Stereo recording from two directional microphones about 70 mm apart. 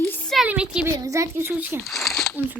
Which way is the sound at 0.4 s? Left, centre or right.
Centre.